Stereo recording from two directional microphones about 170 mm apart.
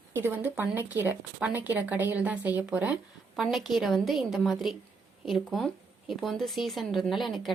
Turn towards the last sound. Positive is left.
turn(degrees=0)  # may be behind; listen again after turning